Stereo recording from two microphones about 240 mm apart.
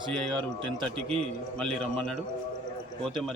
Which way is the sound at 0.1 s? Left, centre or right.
Centre.